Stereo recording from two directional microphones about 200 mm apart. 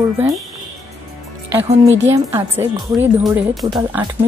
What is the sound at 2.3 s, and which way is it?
Speech, 10° right (ahead or behind).